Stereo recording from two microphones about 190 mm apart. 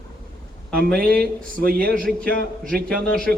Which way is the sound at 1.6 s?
50° right (ahead or behind).